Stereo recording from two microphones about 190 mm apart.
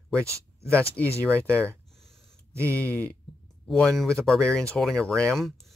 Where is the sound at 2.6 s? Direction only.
15° right (ahead or behind).